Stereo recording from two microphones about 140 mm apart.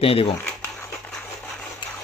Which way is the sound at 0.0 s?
40° left (ahead or behind).